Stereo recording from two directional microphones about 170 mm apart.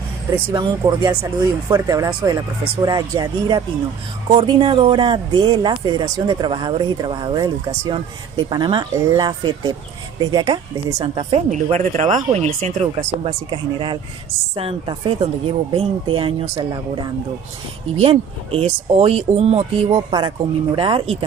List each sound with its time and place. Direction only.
0.5 s speech: 20° right (ahead or behind)
11.5 s speech: 40° right (ahead or behind)
13.5 s speech: 30° right (ahead or behind)
18.0 s speech: 35° right (ahead or behind)